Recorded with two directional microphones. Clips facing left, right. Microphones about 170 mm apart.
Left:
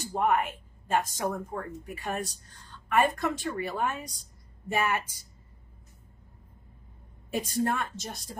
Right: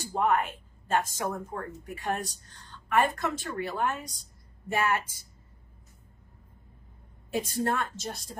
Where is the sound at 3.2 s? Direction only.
15° left (ahead or behind).